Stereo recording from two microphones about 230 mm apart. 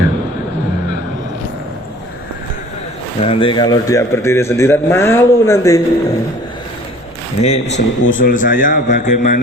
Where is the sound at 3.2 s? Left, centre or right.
Left.